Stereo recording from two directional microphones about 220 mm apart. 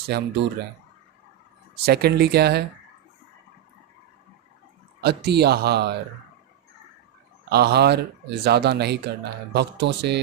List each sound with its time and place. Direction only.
0.1 s speech: 50° right (ahead or behind)
1.8 s speech: 45° right (ahead or behind)
4.9 s speech: 50° right (ahead or behind)
7.5 s speech: 50° right (ahead or behind)